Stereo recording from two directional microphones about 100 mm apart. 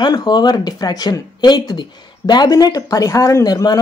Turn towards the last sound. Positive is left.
turn(degrees=40)  # may be behind; listen again after turning